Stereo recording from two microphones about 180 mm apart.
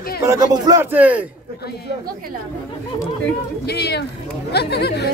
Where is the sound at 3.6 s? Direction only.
65° left (ahead or behind).